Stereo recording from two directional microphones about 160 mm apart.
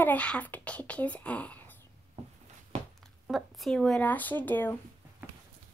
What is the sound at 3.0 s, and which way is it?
Speech, centre (ahead or behind).